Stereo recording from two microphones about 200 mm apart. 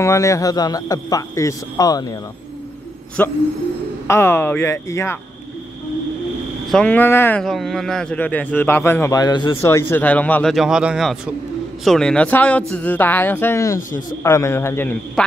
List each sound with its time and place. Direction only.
0.0 s a man's voice: 15° left (ahead or behind)
3.2 s a man's voice: 10° left (ahead or behind)
6.7 s a man's voice: 5° left (ahead or behind)
7.4 s a man's voice: centre (ahead or behind)